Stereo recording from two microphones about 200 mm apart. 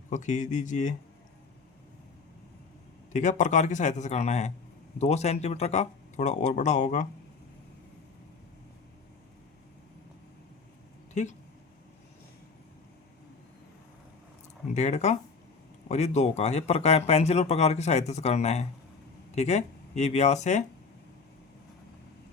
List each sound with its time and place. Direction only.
0.1 s speech: 40° left (ahead or behind)
3.1 s speech: 40° left (ahead or behind)
11.1 s speech: 35° left (ahead or behind)
14.7 s speech: 35° left (ahead or behind)